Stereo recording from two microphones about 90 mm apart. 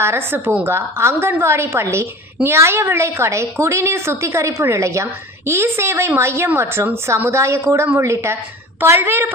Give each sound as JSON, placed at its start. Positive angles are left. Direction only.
{"t": 0.0, "sound": "a woman's voice", "side_deg": -25}